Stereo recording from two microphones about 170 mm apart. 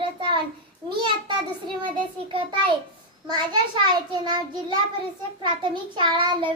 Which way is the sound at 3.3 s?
25° right (ahead or behind).